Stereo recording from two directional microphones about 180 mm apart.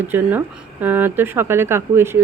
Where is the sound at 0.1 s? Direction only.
10° right (ahead or behind).